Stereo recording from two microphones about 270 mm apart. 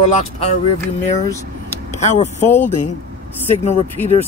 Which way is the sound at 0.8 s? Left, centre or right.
Centre.